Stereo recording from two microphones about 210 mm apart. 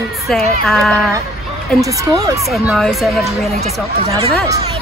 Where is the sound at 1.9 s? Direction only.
15° right (ahead or behind).